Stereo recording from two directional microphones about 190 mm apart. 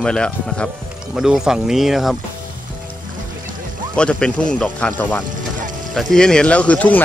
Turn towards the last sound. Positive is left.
turn(degrees=5)  # may be behind; listen again after turning